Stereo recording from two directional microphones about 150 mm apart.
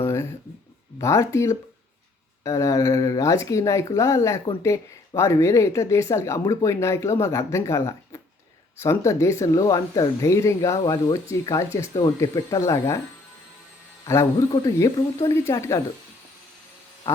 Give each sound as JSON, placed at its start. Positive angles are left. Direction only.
{"t": 0.0, "sound": "a sound", "side_deg": 20}
{"t": 0.9, "sound": "speech", "side_deg": 20}
{"t": 14.0, "sound": "a man's voice", "side_deg": 20}